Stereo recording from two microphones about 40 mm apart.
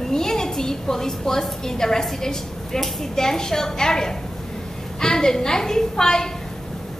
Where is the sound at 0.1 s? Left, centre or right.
Centre.